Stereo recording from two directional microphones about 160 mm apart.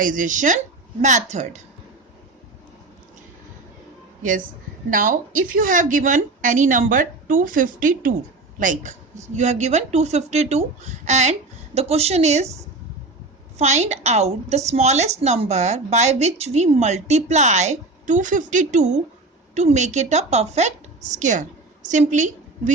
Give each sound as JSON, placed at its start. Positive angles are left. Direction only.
{"t": 0.0, "sound": "a woman's voice", "side_deg": -55}
{"t": 4.2, "sound": "a woman's voice", "side_deg": -55}
{"t": 13.6, "sound": "a woman's voice", "side_deg": -45}